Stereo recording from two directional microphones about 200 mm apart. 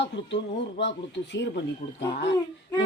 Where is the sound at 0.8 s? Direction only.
60° left (ahead or behind).